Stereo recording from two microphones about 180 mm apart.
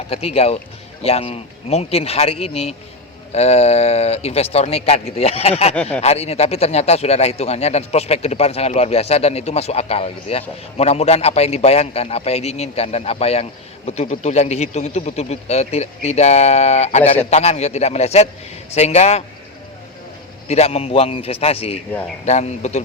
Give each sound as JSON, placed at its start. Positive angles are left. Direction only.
{"t": 0.1, "sound": "a man's voice", "side_deg": 35}
{"t": 5.7, "sound": "speech", "side_deg": 5}
{"t": 6.0, "sound": "a man's voice", "side_deg": 35}
{"t": 20.5, "sound": "a man's voice", "side_deg": 35}